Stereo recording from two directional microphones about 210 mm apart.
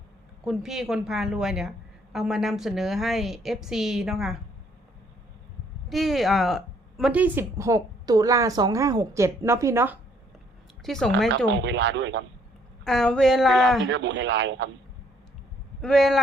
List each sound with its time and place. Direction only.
0.4 s a woman's voice: centre (ahead or behind)
5.9 s speech: centre (ahead or behind)
10.8 s a woman's voice: centre (ahead or behind)
11.3 s speech: 60° right (ahead or behind)
12.8 s a woman's voice: centre (ahead or behind)
13.8 s speech: 55° right (ahead or behind)
15.8 s a woman's voice: centre (ahead or behind)